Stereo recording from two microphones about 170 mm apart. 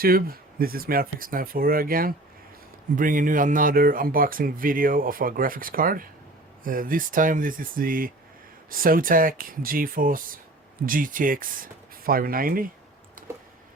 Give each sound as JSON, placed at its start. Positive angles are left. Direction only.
{"t": 0.0, "sound": "speech", "side_deg": -60}